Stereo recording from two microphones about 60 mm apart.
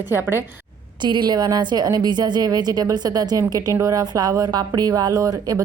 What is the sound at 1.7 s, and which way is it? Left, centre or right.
Speech, right.